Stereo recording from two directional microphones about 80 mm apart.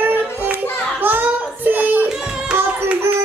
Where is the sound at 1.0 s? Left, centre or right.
Right.